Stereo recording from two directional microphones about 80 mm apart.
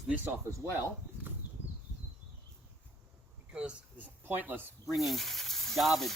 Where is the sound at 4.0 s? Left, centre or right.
Right.